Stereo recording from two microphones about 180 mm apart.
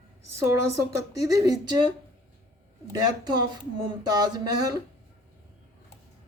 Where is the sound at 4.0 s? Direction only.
20° right (ahead or behind).